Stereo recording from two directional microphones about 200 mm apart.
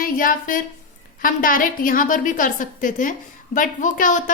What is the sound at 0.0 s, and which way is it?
A woman's voice, 45° left (ahead or behind).